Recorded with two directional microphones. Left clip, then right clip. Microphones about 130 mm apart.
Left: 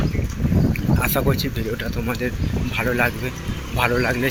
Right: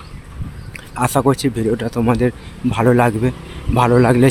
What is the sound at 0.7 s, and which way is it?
Speech, 65° right (ahead or behind).